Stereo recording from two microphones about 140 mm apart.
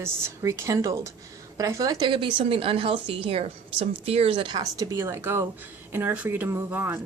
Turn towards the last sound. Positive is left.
turn(degrees=-15)  # may be behind; listen again after turning